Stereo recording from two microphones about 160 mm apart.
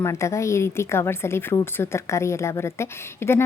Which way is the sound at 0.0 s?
20° left (ahead or behind).